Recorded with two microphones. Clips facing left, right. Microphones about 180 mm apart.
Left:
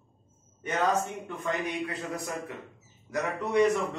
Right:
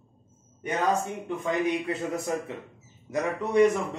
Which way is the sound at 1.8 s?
25° right (ahead or behind).